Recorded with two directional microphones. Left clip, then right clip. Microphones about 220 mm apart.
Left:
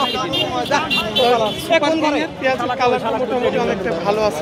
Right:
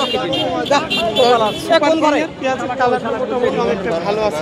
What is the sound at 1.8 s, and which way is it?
Speech, 10° right (ahead or behind).